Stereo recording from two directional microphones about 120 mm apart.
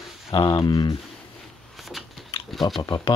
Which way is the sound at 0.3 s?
45° left (ahead or behind).